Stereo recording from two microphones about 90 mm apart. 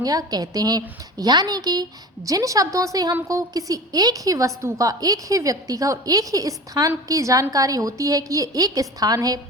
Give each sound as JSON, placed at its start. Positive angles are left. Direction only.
{"t": 0.0, "sound": "a woman's voice", "side_deg": -45}